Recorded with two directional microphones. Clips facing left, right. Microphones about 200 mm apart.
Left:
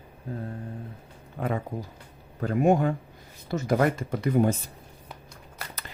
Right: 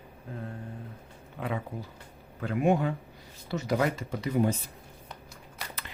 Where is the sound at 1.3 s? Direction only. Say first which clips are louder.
Left 4 dB; 45° left (ahead or behind).